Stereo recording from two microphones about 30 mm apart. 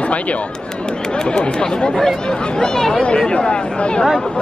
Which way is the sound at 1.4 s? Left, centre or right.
Left.